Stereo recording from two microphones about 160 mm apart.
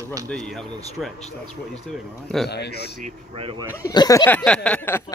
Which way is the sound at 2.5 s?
90° left.